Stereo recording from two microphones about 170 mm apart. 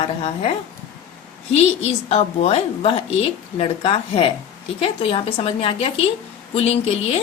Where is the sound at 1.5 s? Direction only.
40° left (ahead or behind).